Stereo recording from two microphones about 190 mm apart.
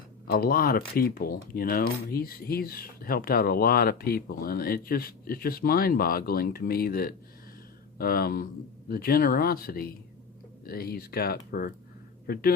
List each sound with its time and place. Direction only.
0.3 s speech: 50° left (ahead or behind)